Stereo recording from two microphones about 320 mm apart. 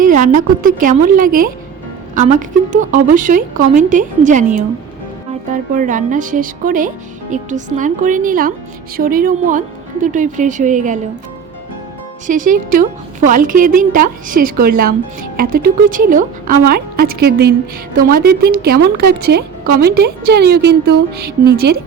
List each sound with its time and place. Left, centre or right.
0.0 s a sound: right
0.6 s a woman's voice: right
5.7 s a woman's voice: right
12.3 s a woman's voice: right